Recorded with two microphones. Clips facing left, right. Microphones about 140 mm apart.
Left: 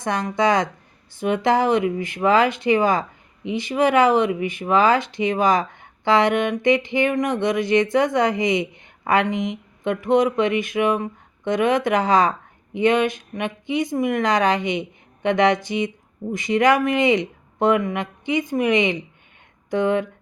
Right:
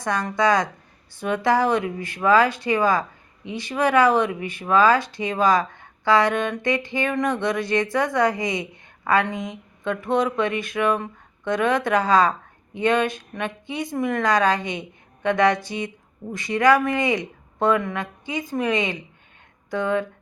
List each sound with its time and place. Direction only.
0.0 s speech: 20° left (ahead or behind)